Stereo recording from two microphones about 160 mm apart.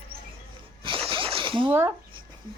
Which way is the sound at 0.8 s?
35° right (ahead or behind).